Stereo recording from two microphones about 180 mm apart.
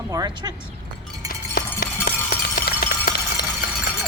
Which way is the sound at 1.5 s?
60° left (ahead or behind).